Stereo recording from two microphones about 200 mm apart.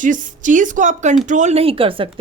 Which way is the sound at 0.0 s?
40° right (ahead or behind).